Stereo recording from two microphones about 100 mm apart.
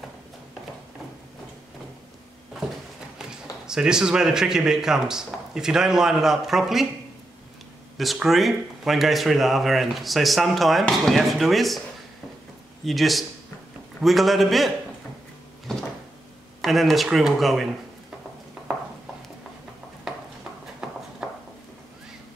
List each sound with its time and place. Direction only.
3.2 s speech: 5° right (ahead or behind)
8.0 s speech: centre (ahead or behind)
12.8 s speech: centre (ahead or behind)
15.7 s cupboard open or close: 5° left (ahead or behind)
16.6 s speech: centre (ahead or behind)
20.1 s a sound: 5° right (ahead or behind)